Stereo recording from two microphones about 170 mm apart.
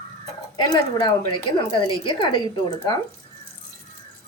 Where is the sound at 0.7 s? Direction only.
25° left (ahead or behind).